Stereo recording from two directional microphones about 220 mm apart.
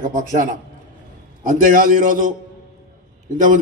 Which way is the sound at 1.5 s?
40° right (ahead or behind).